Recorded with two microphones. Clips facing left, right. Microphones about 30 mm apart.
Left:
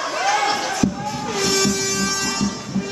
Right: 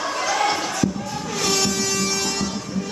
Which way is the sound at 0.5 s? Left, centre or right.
Centre.